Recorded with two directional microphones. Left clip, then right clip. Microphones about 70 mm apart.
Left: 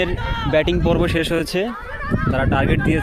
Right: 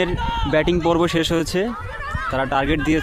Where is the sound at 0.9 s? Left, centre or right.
Right.